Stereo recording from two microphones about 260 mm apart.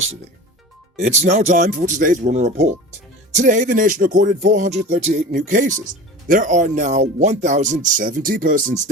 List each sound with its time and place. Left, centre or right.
0.9 s speech: right